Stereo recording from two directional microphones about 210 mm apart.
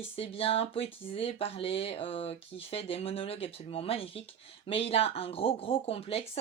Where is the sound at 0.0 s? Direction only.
25° left (ahead or behind).